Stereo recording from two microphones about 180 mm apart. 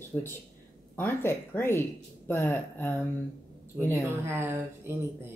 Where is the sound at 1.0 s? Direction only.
10° left (ahead or behind).